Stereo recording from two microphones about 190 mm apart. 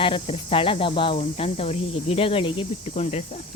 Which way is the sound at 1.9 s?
30° left (ahead or behind).